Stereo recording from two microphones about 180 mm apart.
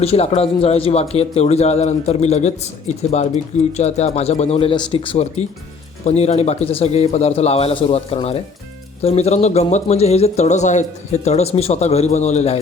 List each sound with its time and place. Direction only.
0.0 s speech: 35° left (ahead or behind)
3.8 s speech: 40° left (ahead or behind)